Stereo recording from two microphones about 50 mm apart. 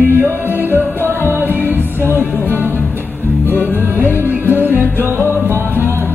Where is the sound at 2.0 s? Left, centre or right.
Right.